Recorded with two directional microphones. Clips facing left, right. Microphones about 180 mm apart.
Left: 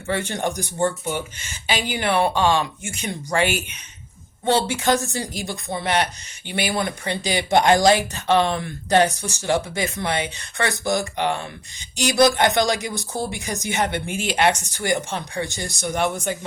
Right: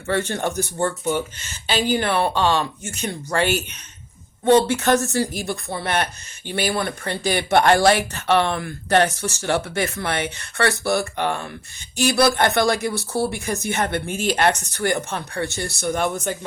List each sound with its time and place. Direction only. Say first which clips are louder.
0.1 s speech: right 2 dB; 15° left (ahead or behind)
4.6 s speech: right 2 dB; 10° left (ahead or behind)